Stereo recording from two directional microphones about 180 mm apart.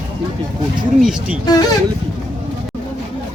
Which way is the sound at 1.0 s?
5° right (ahead or behind).